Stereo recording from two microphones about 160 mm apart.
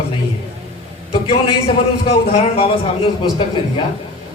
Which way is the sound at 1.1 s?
35° left (ahead or behind).